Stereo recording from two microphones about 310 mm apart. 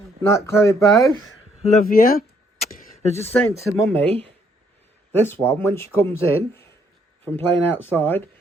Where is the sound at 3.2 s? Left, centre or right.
Centre.